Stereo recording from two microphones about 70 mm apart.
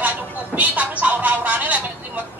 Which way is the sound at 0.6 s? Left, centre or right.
Right.